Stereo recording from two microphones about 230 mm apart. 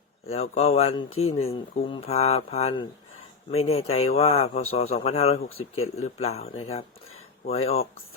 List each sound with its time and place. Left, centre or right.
0.3 s speech: left